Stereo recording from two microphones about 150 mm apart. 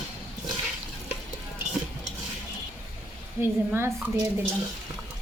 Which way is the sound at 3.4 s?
15° right (ahead or behind).